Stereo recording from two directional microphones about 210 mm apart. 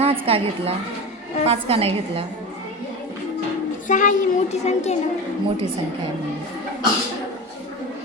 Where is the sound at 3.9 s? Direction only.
40° left (ahead or behind).